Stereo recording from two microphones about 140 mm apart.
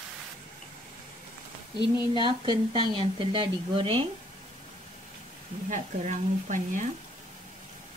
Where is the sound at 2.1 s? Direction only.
35° right (ahead or behind).